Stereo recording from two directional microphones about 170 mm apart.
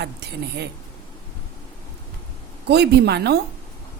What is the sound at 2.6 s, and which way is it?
Speech, 75° right (ahead or behind).